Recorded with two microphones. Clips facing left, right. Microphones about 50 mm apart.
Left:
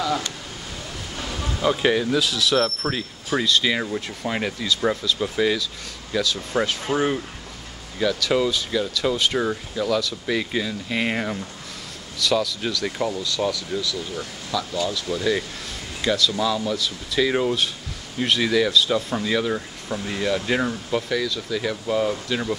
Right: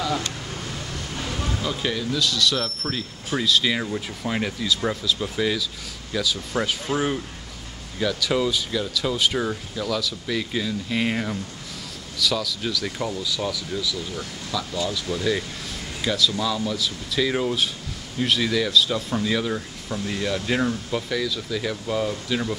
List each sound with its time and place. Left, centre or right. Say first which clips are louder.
1.1 s a sound: right 1 dB; centre
1.6 s speech: left 10 dB; left
2.2 s speech: left 3 dB; centre
3.4 s speech: right 1 dB; centre